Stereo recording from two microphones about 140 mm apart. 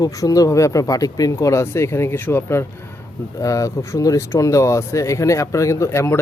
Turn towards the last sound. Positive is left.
turn(degrees=20)  # may be behind; listen again after turning